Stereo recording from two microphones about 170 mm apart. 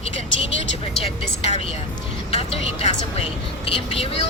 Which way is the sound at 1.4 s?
35° left (ahead or behind).